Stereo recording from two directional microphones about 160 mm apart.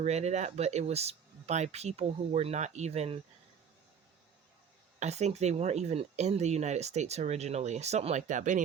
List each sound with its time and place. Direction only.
0.0 s speech: 45° right (ahead or behind)
4.9 s speech: 45° right (ahead or behind)